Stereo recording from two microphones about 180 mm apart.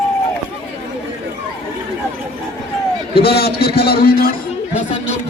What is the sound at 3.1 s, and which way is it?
A man's voice, 60° left (ahead or behind).